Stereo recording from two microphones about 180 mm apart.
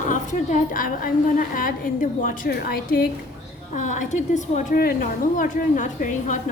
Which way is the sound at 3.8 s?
45° left (ahead or behind).